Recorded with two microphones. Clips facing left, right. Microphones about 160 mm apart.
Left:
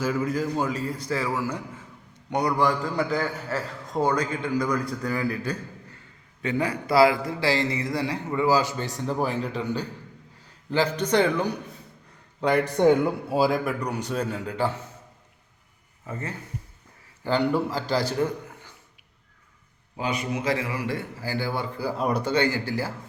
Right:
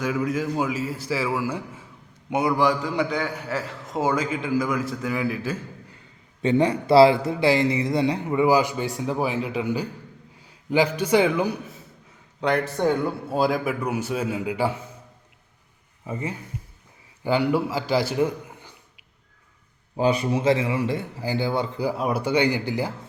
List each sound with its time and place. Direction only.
0.0 s a man's voice: centre (ahead or behind)
6.4 s a man's voice: 25° right (ahead or behind); by 11.5 s 10° right (ahead or behind)
12.4 s speech: 5° left (ahead or behind)
12.6 s a man's voice: 20° left (ahead or behind)
13.3 s a man's voice: centre (ahead or behind)
16.0 s a man's voice: 15° right (ahead or behind)
20.0 s a man's voice: 30° right (ahead or behind)
21.9 s a man's voice: 5° right (ahead or behind)